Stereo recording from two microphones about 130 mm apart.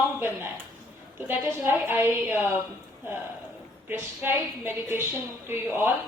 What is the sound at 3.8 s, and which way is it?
A woman's voice, 15° right (ahead or behind).